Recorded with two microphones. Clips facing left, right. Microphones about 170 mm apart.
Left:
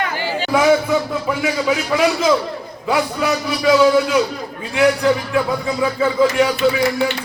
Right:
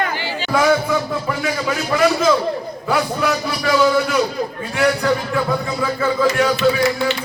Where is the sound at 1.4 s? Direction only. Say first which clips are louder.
Left 3 dB; 15° left (ahead or behind).